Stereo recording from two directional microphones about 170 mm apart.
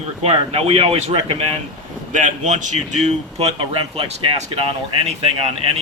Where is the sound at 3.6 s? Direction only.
30° right (ahead or behind).